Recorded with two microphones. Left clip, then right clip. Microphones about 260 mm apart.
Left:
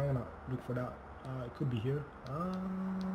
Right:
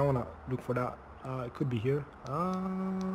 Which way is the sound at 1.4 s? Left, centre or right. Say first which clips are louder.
Right 5 dB; centre.